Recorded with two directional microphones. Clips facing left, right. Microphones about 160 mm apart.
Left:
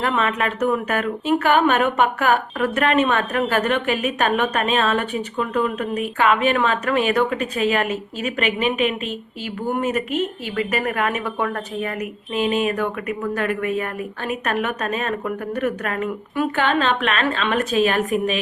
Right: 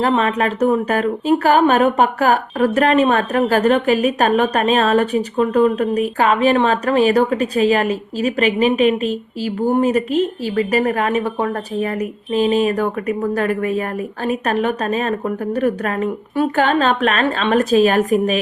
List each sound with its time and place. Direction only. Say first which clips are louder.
0.0 s speech: right 5 dB; 35° right (ahead or behind)